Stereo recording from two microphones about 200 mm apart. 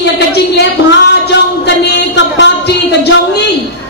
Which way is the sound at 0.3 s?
55° left (ahead or behind).